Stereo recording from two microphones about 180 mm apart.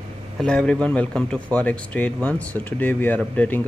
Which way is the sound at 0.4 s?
5° left (ahead or behind).